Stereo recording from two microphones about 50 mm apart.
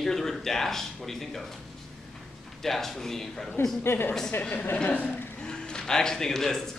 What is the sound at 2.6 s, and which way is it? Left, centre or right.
Speech, centre.